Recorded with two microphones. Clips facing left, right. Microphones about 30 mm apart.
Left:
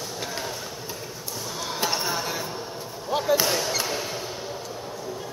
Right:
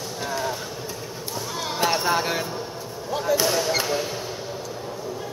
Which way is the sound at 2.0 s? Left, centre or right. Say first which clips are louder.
Right 5 dB; right.